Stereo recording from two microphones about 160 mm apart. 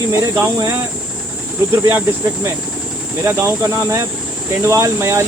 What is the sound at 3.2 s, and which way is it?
Speech, 15° right (ahead or behind).